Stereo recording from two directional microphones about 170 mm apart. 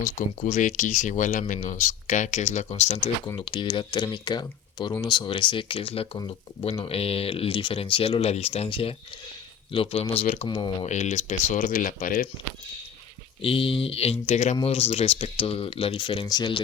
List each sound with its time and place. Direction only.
0.0 s speech: 50° left (ahead or behind)
3.3 s speech: 30° left (ahead or behind)
10.8 s speech: 45° left (ahead or behind)
13.4 s speech: 35° left (ahead or behind)